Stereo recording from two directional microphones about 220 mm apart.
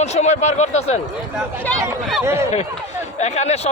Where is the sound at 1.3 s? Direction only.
5° left (ahead or behind).